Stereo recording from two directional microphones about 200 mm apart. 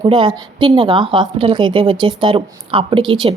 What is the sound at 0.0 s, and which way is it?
A woman's voice, 25° right (ahead or behind).